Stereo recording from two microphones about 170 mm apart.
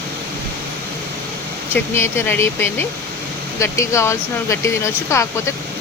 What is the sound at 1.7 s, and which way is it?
Speech, 15° left (ahead or behind).